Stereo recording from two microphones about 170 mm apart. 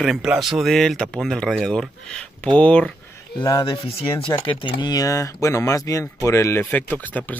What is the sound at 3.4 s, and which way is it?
Speech, 20° left (ahead or behind).